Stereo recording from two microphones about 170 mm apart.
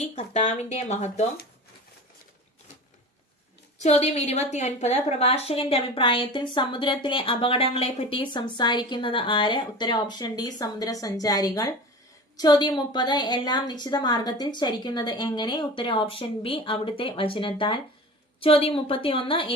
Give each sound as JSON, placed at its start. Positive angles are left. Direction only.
{"t": 0.0, "sound": "speech", "side_deg": 40}
{"t": 3.8, "sound": "a woman's voice", "side_deg": 40}